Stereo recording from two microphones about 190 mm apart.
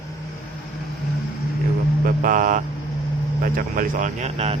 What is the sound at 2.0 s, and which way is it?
Speech, 45° right (ahead or behind).